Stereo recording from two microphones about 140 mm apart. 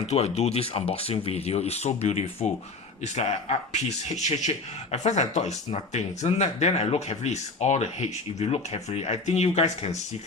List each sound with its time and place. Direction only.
0.0 s speech: 50° left (ahead or behind)